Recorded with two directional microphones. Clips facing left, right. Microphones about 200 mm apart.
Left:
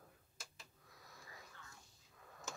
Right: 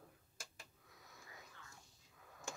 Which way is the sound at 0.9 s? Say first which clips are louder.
Left 1 dB; centre (ahead or behind).